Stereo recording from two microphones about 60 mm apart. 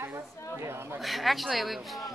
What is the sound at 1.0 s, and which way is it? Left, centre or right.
Speech, centre.